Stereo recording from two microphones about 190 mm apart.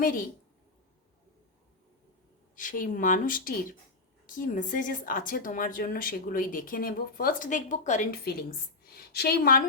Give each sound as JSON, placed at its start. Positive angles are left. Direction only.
{"t": 2.6, "sound": "speech", "side_deg": 45}